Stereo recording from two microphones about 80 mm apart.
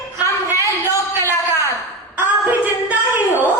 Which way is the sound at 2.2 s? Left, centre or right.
Right.